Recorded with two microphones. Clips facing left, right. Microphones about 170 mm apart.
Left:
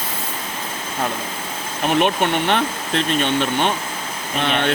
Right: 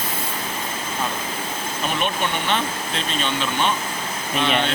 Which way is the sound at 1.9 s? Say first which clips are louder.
Left 7 dB; 60° left (ahead or behind).